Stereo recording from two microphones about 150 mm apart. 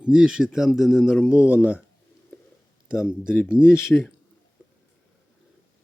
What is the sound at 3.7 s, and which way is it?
Speech, 15° left (ahead or behind).